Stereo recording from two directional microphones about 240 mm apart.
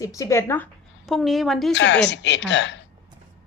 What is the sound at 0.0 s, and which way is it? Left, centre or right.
A woman's voice, centre.